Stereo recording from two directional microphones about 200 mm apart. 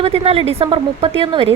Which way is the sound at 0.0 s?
30° right (ahead or behind).